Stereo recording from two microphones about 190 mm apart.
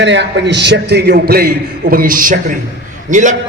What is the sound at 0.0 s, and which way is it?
A man's voice, 70° right (ahead or behind).